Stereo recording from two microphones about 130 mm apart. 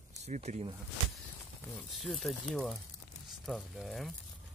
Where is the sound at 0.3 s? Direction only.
60° right (ahead or behind).